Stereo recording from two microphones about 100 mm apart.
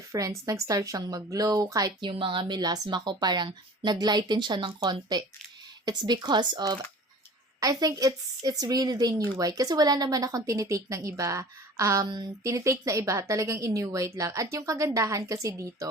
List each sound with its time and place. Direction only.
0.1 s a woman's voice: 35° right (ahead or behind)
2.0 s a woman's voice: 55° right (ahead or behind); by 15.9 s 30° right (ahead or behind)